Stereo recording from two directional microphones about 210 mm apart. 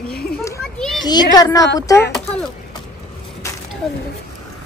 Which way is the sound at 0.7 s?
Centre (ahead or behind).